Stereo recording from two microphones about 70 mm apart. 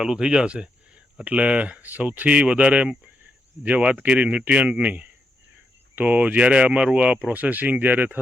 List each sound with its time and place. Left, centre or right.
0.0 s speech: centre